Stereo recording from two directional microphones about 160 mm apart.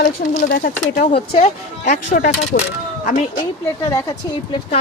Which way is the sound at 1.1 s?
40° left (ahead or behind).